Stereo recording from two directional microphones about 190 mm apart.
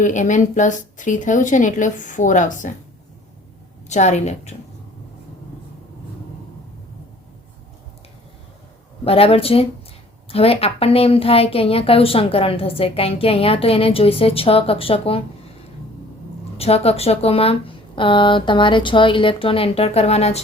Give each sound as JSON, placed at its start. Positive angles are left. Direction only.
{"t": 0.0, "sound": "a woman's voice", "side_deg": 40}
{"t": 3.8, "sound": "a woman's voice", "side_deg": 35}
{"t": 9.0, "sound": "a woman's voice", "side_deg": 30}
{"t": 16.6, "sound": "a woman's voice", "side_deg": 30}